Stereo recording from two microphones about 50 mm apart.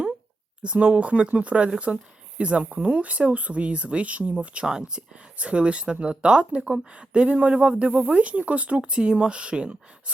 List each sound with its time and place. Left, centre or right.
0.6 s speech: right